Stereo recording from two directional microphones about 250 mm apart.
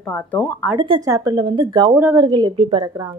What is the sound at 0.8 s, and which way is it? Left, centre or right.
Speech, centre.